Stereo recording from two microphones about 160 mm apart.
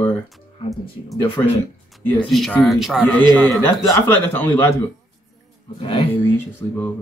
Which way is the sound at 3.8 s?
15° left (ahead or behind).